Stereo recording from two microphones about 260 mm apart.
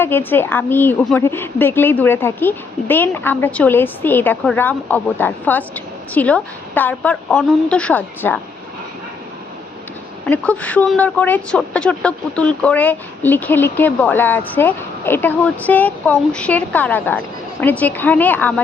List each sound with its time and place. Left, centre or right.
0.0 s a woman's voice: centre
10.2 s a woman's voice: centre